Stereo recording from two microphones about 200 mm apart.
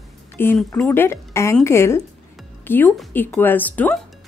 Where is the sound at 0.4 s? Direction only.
10° left (ahead or behind).